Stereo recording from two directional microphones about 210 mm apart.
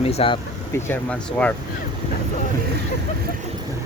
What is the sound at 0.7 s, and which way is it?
Speech, 10° left (ahead or behind).